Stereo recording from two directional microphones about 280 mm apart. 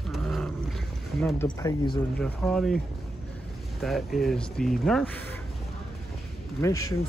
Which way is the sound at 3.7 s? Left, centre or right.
Centre.